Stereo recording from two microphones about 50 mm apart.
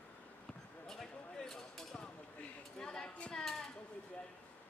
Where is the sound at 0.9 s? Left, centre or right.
Centre.